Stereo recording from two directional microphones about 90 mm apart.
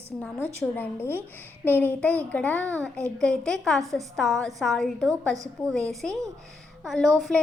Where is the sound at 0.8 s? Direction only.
25° left (ahead or behind); by 7.1 s centre (ahead or behind).